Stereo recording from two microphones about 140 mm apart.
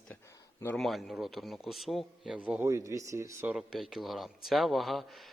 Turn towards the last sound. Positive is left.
turn(degrees=0)  # may be behind; listen again after turning